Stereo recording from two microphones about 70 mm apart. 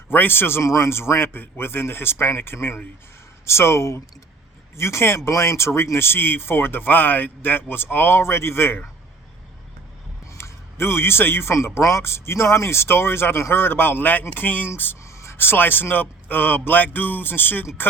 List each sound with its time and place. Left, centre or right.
0.1 s a man's voice: left
0.6 s a man's voice: left
10.3 s a man's voice: left
15.0 s a man's voice: left